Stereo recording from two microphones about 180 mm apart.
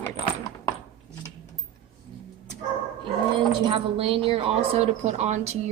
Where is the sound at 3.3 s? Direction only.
30° right (ahead or behind).